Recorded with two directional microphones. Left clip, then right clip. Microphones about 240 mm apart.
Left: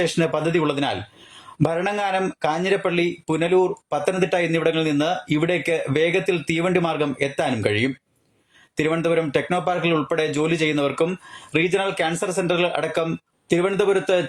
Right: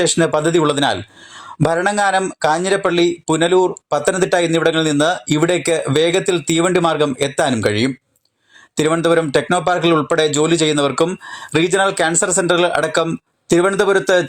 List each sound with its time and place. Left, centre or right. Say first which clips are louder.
0.0 s speech: right 6 dB; right